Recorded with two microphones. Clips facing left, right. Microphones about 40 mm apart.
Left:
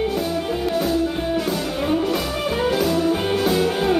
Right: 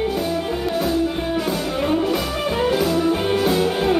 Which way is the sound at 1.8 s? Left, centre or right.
Centre.